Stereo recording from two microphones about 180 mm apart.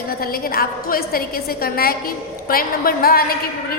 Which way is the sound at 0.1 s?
55° left (ahead or behind).